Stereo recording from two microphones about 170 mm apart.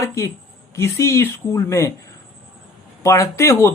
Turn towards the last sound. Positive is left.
turn(degrees=15)  # may be behind; listen again after turning